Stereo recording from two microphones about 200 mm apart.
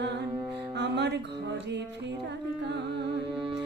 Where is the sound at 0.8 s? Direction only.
60° right (ahead or behind).